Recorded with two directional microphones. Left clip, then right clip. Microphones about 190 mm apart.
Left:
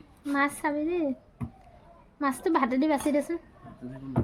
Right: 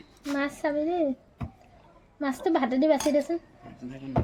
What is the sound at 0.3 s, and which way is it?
Speech, 30° left (ahead or behind).